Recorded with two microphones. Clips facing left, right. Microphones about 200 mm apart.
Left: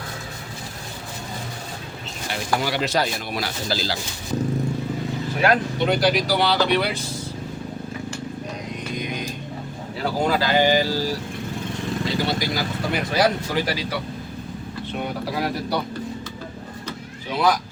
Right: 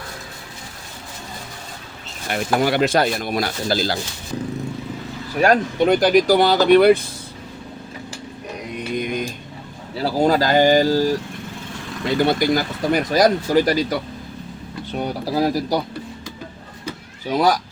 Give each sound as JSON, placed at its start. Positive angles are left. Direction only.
{"t": 2.3, "sound": "speech", "side_deg": -55}
{"t": 5.4, "sound": "speech", "side_deg": -45}
{"t": 9.0, "sound": "a sound", "side_deg": -50}
{"t": 10.0, "sound": "speech", "side_deg": -40}
{"t": 15.0, "sound": "speech", "side_deg": -35}
{"t": 17.2, "sound": "speech", "side_deg": -40}